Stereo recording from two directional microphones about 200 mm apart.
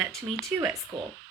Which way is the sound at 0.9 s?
25° right (ahead or behind).